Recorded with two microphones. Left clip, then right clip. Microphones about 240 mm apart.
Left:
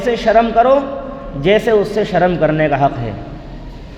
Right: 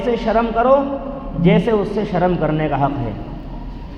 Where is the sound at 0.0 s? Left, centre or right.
Left.